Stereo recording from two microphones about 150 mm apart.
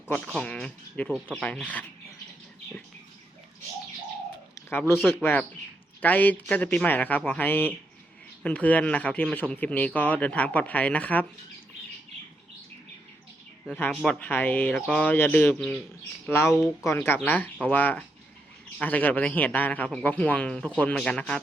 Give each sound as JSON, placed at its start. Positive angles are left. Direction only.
{"t": 0.1, "sound": "a man's voice", "side_deg": 10}
{"t": 4.9, "sound": "a man's voice", "side_deg": 0}
{"t": 13.7, "sound": "a man's voice", "side_deg": 10}